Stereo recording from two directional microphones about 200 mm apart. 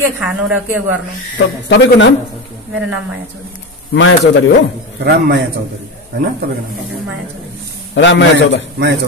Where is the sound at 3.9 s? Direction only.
65° left (ahead or behind).